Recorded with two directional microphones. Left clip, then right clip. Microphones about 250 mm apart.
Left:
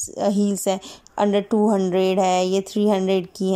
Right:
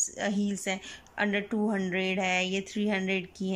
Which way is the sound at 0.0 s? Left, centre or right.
Centre.